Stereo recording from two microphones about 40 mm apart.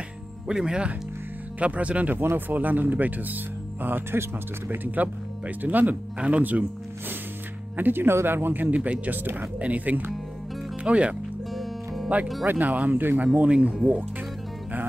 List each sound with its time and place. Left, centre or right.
0.6 s speech: right
1.6 s speech: right
2.3 s speech: right
3.8 s speech: right
4.6 s speech: right
7.7 s speech: right
8.6 s speech: right
9.0 s speech: right
9.6 s speech: right
10.8 s speech: right
11.5 s music: centre
12.4 s speech: right
13.2 s speech: right